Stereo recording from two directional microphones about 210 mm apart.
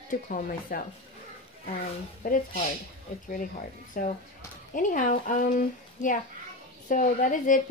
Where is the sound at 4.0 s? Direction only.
40° left (ahead or behind).